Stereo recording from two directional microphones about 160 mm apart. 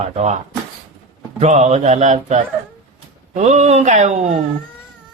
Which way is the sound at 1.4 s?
45° right (ahead or behind).